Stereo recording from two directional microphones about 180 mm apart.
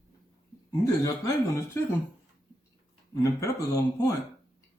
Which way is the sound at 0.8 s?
20° left (ahead or behind).